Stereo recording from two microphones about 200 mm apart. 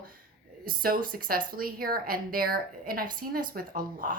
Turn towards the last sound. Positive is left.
turn(degrees=-45)  # may be behind; listen again after turning